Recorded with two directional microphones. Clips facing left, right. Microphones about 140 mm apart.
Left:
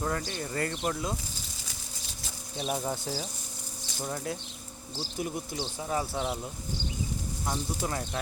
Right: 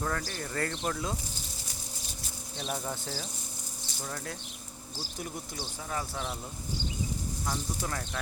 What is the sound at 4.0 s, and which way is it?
Speech, 20° left (ahead or behind).